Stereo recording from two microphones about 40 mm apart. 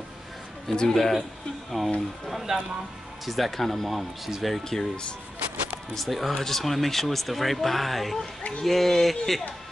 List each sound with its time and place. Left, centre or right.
0.7 s speech: centre
1.8 s speech: centre
2.5 s speech: centre
3.3 s speech: centre
4.6 s speech: centre
5.9 s speech: centre